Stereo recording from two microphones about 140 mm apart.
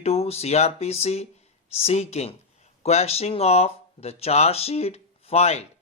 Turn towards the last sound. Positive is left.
turn(degrees=50)  # may be behind; listen again after turning